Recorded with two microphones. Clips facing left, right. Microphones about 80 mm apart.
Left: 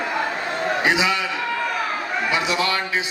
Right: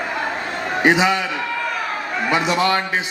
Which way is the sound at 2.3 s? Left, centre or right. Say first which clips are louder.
Right 6 dB; right.